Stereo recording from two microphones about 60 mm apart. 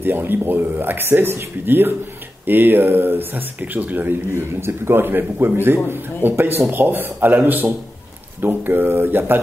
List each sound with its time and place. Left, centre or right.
0.0 s speech: right
4.3 s speech: right